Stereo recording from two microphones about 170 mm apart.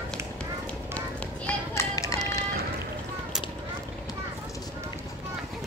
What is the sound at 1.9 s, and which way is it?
Run, 20° left (ahead or behind).